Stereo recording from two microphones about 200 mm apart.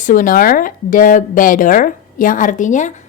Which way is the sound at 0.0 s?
40° left (ahead or behind).